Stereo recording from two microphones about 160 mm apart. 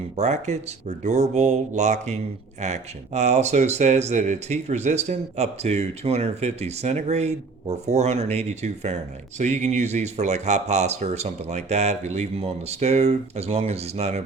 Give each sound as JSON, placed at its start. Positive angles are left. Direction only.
{"t": 0.2, "sound": "speech", "side_deg": -45}